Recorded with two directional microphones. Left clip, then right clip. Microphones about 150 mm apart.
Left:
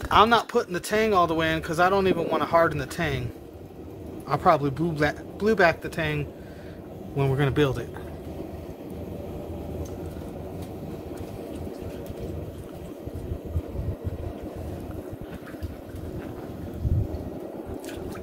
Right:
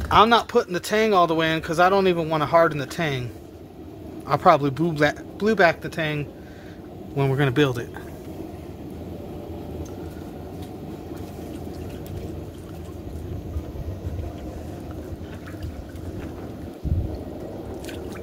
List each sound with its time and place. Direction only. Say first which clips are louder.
0.1 s speech: right 3 dB; 40° right (ahead or behind)
4.3 s speech: right 4 dB; 45° right (ahead or behind)